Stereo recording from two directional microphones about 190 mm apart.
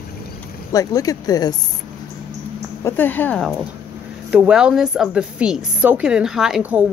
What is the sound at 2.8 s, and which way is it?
A woman's voice, 10° left (ahead or behind).